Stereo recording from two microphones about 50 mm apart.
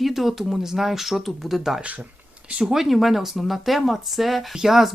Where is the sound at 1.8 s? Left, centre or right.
Right.